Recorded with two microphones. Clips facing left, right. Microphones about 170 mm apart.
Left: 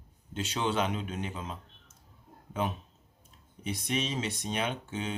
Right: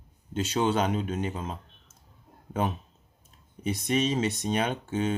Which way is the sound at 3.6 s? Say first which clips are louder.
Right 6 dB; 45° right (ahead or behind).